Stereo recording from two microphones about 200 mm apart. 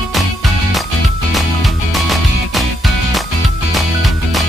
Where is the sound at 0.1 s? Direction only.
Centre (ahead or behind).